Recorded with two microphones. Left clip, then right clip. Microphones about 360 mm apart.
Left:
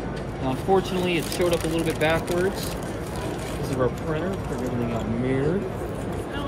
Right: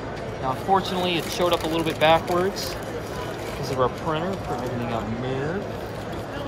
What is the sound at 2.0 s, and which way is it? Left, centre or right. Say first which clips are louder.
Speech: right 6 dB; centre.